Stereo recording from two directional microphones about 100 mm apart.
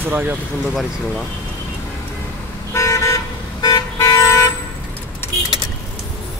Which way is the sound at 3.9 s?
30° left (ahead or behind).